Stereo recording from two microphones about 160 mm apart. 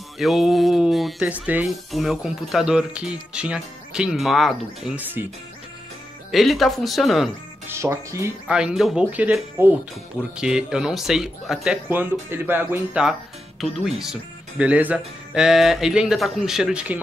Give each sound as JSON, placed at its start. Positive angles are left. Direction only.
{"t": 0.2, "sound": "speech", "side_deg": 0}
{"t": 6.3, "sound": "speech", "side_deg": 0}
{"t": 7.7, "sound": "speech", "side_deg": -15}
{"t": 8.5, "sound": "speech", "side_deg": -5}